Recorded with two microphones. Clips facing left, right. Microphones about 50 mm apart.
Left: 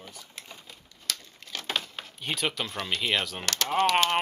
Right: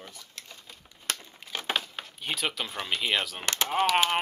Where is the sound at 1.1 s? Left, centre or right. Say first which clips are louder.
Right 2 dB; right.